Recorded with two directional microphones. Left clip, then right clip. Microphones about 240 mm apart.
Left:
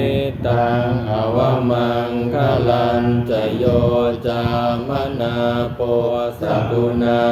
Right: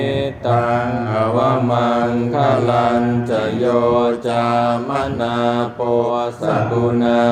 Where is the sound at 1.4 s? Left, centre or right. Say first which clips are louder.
Even; right.